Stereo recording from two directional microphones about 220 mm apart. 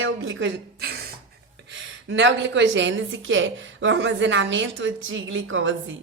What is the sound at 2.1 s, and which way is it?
Speech, 55° right (ahead or behind).